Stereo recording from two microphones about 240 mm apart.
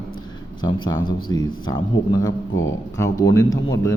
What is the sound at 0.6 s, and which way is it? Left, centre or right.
A man's voice, centre.